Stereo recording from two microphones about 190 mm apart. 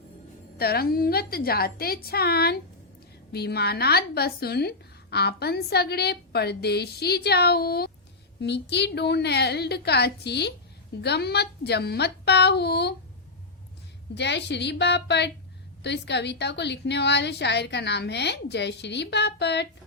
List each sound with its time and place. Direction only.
0.6 s a woman's voice: 55° left (ahead or behind)
14.2 s a woman's voice: 65° left (ahead or behind)